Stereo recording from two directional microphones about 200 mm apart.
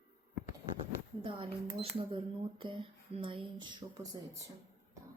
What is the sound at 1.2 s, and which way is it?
Speech, 25° right (ahead or behind).